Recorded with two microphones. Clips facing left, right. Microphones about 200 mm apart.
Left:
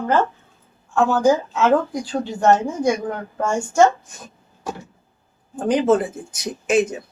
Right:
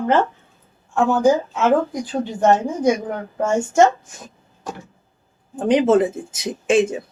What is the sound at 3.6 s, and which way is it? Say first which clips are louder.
Speech: right 1 dB; 20° right (ahead or behind).